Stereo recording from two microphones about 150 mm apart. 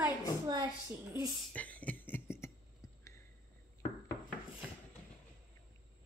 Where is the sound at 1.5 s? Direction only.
10° left (ahead or behind).